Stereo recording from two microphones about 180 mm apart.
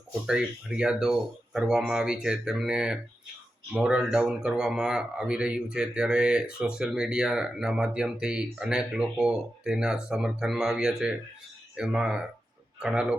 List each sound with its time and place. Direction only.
0.3 s speech: 5° right (ahead or behind)